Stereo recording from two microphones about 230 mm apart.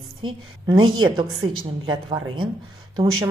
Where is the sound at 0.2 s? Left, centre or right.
Centre.